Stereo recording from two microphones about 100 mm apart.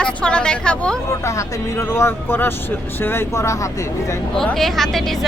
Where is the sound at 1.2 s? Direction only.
30° left (ahead or behind).